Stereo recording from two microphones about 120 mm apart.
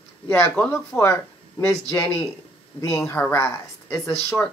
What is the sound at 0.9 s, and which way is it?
Speech, 25° left (ahead or behind).